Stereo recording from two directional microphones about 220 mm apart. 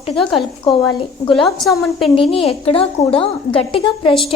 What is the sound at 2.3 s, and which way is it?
A woman's voice, 25° left (ahead or behind).